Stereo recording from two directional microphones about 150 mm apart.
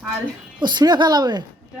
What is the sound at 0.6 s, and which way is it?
Speech, 30° right (ahead or behind).